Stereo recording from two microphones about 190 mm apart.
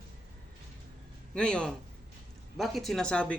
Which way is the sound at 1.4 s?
5° left (ahead or behind).